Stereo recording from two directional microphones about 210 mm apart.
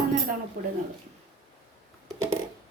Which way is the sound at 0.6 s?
40° right (ahead or behind).